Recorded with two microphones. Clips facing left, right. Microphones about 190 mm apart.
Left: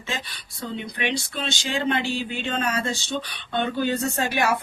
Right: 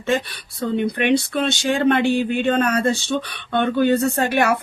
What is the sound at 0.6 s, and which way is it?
Speech, 55° right (ahead or behind).